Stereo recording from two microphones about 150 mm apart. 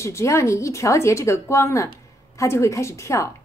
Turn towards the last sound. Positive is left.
turn(degrees=20)  # may be behind; listen again after turning